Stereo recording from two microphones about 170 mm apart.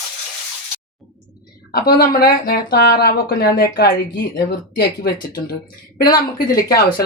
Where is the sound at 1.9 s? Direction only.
60° left (ahead or behind).